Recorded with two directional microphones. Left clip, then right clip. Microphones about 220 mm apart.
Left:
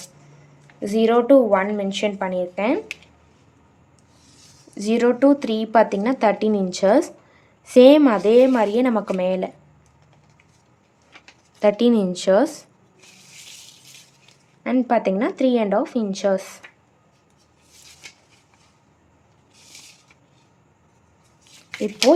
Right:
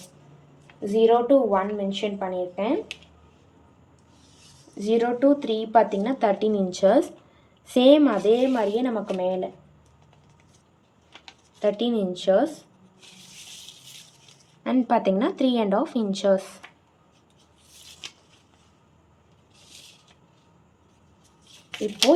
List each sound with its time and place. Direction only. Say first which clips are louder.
0.9 s a woman's voice: left 2 dB; 45° left (ahead or behind)
4.8 s speech: left 4 dB; 35° left (ahead or behind)
11.6 s speech: left 6 dB; 30° left (ahead or behind)
14.6 s speech: left 3 dB; 15° left (ahead or behind)